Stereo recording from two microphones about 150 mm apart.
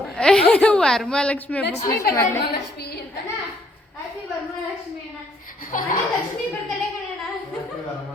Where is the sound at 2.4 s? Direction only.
90° left.